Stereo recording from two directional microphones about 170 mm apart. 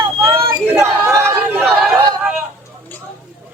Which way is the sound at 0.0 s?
10° right (ahead or behind).